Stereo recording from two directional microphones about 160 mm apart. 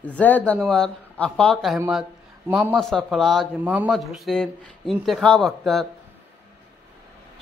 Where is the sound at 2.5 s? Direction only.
10° right (ahead or behind).